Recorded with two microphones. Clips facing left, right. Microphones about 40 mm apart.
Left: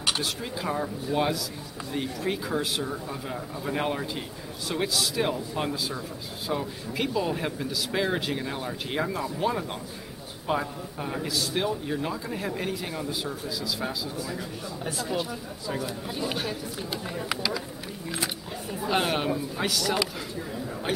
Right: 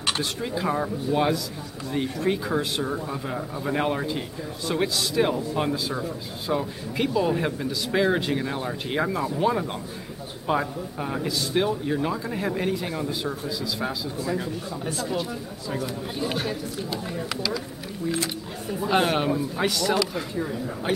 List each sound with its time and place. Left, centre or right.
0.0 s a man's voice: centre
14.2 s speech: centre
14.9 s speech: centre
18.7 s speech: centre